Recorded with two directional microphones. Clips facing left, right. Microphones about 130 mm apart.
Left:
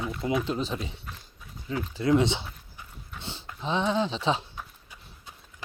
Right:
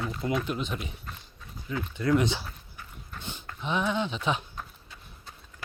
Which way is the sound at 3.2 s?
30° left (ahead or behind).